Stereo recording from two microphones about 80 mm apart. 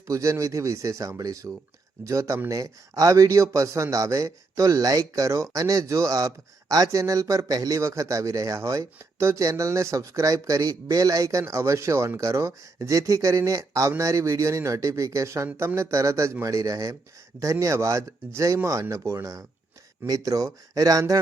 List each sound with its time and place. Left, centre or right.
0.1 s a man's voice: right
20.1 s a man's voice: right